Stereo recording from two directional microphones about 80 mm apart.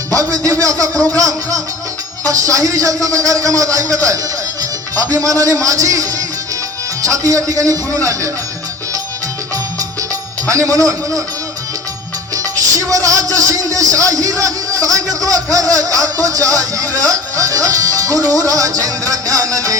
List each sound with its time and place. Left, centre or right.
0.1 s speech: right
10.5 s speech: right
12.3 s speech: right